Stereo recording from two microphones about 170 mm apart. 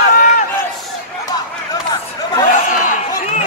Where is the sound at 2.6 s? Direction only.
50° left (ahead or behind).